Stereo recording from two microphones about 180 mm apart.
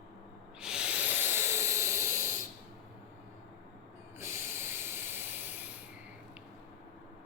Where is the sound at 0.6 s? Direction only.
5° right (ahead or behind).